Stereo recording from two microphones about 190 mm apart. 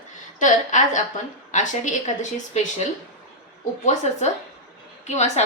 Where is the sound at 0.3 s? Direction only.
40° left (ahead or behind).